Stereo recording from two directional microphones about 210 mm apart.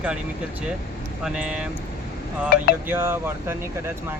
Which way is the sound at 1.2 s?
5° right (ahead or behind).